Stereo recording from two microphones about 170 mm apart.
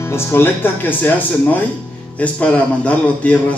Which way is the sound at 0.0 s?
15° left (ahead or behind).